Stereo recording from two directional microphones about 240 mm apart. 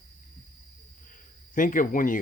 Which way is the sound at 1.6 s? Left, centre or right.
Left.